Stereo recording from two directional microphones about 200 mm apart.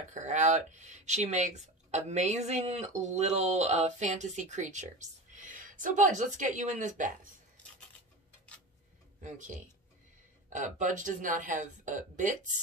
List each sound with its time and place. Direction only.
0.1 s speech: 35° right (ahead or behind)
9.2 s speech: 40° right (ahead or behind)